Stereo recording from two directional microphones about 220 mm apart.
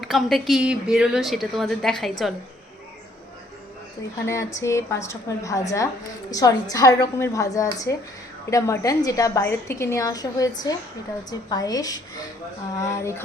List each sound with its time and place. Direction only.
0.0 s a woman's voice: centre (ahead or behind)
4.3 s a woman's voice: 15° left (ahead or behind)